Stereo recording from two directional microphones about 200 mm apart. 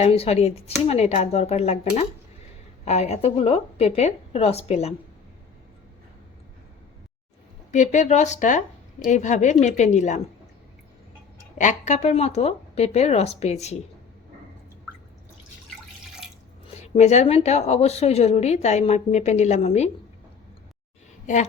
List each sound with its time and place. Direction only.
0.0 s a woman's voice: 30° left (ahead or behind)
7.7 s a woman's voice: 35° left (ahead or behind)
11.5 s a woman's voice: 35° left (ahead or behind)
16.8 s a woman's voice: 35° left (ahead or behind)